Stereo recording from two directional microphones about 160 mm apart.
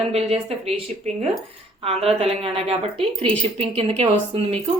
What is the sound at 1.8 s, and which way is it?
A woman's voice, 40° right (ahead or behind).